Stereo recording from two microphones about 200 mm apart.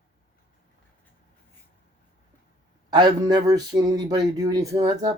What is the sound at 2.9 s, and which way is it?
Speech, 20° right (ahead or behind).